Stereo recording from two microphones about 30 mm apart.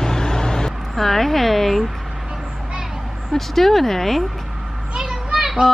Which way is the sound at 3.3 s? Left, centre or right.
Centre.